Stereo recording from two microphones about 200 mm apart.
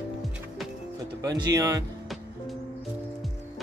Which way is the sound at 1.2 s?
15° right (ahead or behind).